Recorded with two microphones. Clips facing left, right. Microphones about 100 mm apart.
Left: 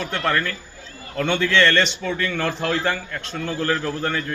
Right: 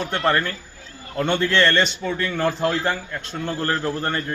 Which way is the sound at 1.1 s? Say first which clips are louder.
Even; 15° right (ahead or behind).